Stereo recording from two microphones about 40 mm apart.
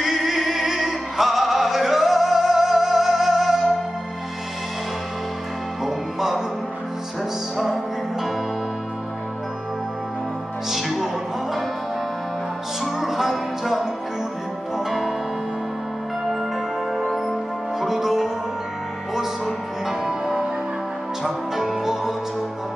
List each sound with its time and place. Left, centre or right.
0.1 s music: centre
5.9 s music: centre
10.7 s music: centre
12.8 s music: centre
16.9 s music: centre
19.4 s music: centre